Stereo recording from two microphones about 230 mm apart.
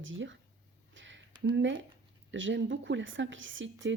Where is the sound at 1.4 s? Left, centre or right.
Right.